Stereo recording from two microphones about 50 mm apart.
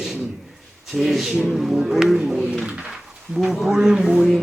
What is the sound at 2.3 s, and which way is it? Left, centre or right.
Speech, centre.